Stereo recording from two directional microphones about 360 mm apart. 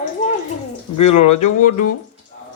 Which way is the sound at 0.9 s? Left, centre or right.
Left.